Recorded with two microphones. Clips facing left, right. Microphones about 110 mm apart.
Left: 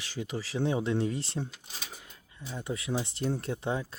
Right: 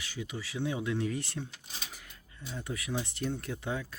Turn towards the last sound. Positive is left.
turn(degrees=25)  # may be behind; listen again after turning